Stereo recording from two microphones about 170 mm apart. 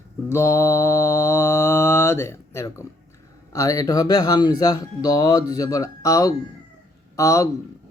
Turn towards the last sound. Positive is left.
turn(degrees=20)  # may be behind; listen again after turning